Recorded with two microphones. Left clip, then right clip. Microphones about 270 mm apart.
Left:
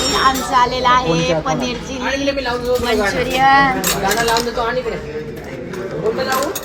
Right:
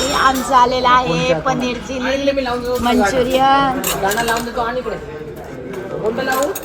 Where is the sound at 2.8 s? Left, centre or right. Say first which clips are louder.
Right 2 dB; centre.